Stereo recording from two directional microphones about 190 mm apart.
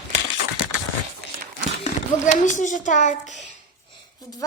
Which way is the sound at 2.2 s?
40° left (ahead or behind).